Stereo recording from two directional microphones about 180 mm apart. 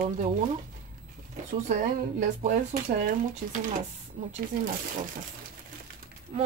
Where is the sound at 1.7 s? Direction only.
40° right (ahead or behind).